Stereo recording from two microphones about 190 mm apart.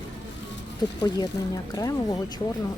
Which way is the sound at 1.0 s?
20° left (ahead or behind).